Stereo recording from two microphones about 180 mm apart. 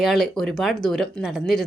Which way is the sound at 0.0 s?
Centre (ahead or behind).